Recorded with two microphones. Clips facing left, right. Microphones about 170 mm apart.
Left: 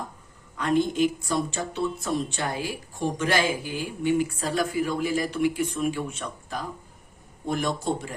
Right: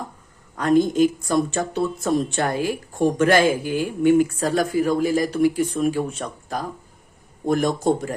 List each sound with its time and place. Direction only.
0.5 s a woman's voice: 40° right (ahead or behind)